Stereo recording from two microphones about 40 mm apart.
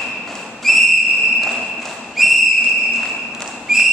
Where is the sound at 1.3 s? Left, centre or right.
Centre.